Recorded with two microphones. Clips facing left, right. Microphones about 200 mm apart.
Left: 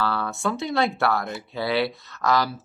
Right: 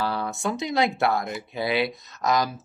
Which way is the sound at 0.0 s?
15° right (ahead or behind).